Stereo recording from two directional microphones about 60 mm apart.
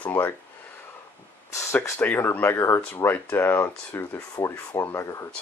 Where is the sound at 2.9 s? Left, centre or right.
Left.